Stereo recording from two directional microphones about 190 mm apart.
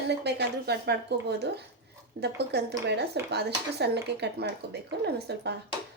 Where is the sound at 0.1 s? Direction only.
60° right (ahead or behind).